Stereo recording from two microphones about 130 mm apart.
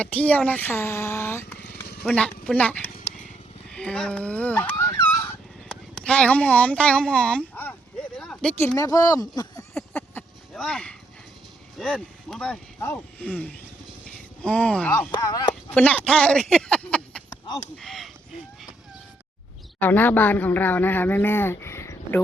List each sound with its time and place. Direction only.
0.0 s speech: 10° left (ahead or behind)
3.7 s fowl: 5° left (ahead or behind)
5.6 s speech: 5° left (ahead or behind)
8.2 s a sound: 5° left (ahead or behind)
8.6 s speech: 20° left (ahead or behind)
10.2 s a sound: 10° left (ahead or behind)
10.5 s speech: 5° left (ahead or behind)
12.8 s speech: 15° left (ahead or behind)
15.1 s speech: 30° left (ahead or behind)
15.7 s speech: 10° left (ahead or behind)
17.2 s chop: 30° left (ahead or behind)
17.7 s speech: centre (ahead or behind)
19.8 s speech: 15° left (ahead or behind)